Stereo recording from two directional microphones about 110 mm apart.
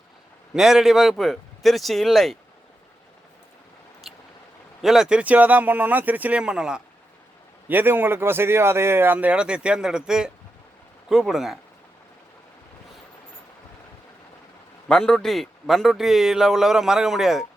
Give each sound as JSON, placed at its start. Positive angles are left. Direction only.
{"t": 0.5, "sound": "speech", "side_deg": -5}
{"t": 4.1, "sound": "a sound", "side_deg": 0}
{"t": 4.8, "sound": "speech", "side_deg": -5}
{"t": 7.7, "sound": "speech", "side_deg": -15}
{"t": 14.8, "sound": "speech", "side_deg": 5}